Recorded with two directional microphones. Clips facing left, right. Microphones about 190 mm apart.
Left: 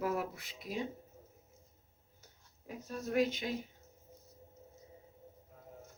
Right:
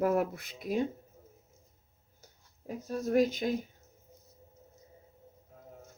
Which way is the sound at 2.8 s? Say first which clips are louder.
Right 5 dB; 40° right (ahead or behind).